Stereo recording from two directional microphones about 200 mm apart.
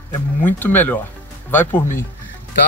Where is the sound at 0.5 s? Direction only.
10° left (ahead or behind).